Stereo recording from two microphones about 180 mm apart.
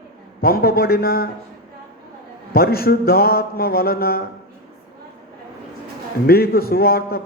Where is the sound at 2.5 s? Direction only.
55° left (ahead or behind).